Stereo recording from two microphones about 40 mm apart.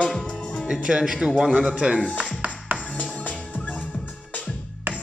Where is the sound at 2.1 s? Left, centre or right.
Right.